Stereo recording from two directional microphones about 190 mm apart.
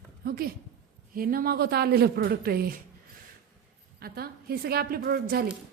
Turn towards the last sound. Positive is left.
turn(degrees=-50)  # may be behind; listen again after turning